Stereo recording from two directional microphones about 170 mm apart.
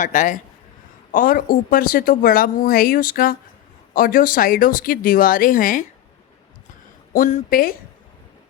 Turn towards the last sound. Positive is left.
turn(degrees=55)  # may be behind; listen again after turning